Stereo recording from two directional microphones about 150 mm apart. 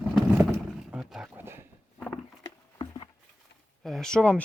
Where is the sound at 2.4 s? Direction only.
35° left (ahead or behind).